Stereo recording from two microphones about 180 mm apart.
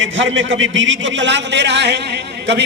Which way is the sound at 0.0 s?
90° right.